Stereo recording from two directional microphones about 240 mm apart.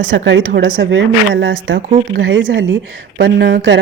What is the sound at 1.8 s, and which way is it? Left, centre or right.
Speech, right.